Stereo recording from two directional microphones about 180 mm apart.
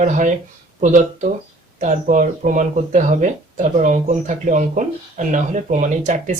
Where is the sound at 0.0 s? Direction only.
45° right (ahead or behind).